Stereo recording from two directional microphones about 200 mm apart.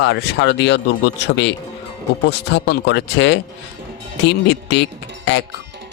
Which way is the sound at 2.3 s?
55° left (ahead or behind).